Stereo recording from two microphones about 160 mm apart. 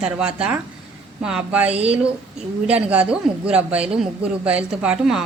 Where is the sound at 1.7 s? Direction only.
40° right (ahead or behind).